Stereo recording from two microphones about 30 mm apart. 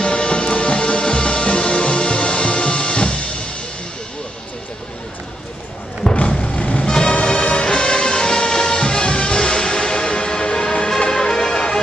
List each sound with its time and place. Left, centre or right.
0.0 s music: left
6.4 s vehicle: left
6.8 s music: left